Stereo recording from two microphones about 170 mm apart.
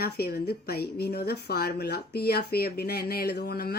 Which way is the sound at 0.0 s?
65° left (ahead or behind).